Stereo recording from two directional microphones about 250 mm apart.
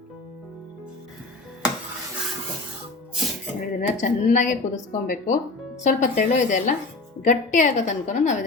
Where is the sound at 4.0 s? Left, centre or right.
Left.